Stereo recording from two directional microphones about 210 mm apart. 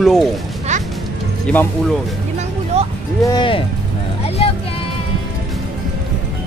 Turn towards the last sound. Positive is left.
turn(degrees=30)  # may be behind; listen again after turning